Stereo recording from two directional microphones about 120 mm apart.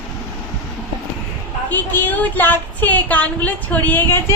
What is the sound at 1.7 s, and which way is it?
Speech, 15° left (ahead or behind).